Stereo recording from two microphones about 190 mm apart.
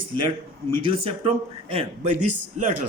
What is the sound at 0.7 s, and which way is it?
Speech, 25° right (ahead or behind).